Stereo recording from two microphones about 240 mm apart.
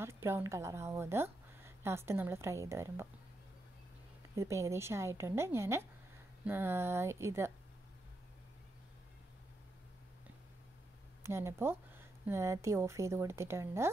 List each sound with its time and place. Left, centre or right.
0.0 s speech: centre
4.4 s a woman's voice: centre
11.2 s a woman's voice: centre